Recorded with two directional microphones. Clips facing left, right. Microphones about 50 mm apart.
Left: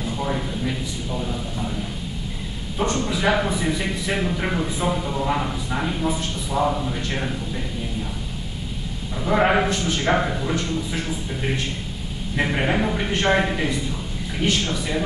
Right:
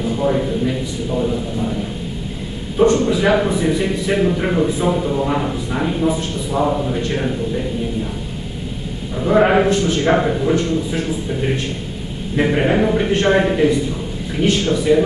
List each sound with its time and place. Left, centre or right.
0.0 s a man's voice: centre
1.1 s a man's voice: centre
2.8 s a man's voice: right
3.1 s a man's voice: centre
9.1 s a man's voice: centre
10.1 s speech: centre
12.4 s a man's voice: centre